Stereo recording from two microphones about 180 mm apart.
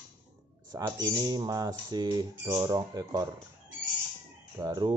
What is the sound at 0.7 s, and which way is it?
A man's voice, 20° right (ahead or behind).